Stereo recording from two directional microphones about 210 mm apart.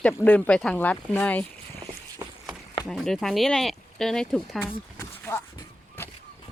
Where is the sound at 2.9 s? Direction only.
Centre (ahead or behind).